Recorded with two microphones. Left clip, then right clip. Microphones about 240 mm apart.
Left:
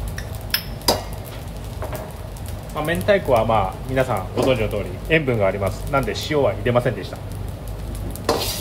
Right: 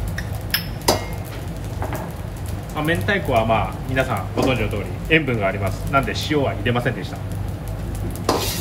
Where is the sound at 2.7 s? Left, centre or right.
Left.